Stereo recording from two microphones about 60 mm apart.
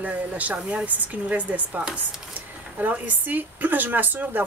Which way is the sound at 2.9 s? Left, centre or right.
Right.